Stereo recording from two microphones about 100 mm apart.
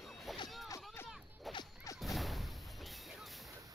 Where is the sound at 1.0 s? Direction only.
25° left (ahead or behind).